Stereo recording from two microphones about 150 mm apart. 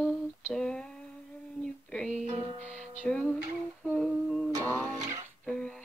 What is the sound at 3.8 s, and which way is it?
Humming, centre (ahead or behind).